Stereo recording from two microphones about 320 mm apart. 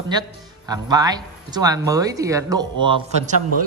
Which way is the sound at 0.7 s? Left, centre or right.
Centre.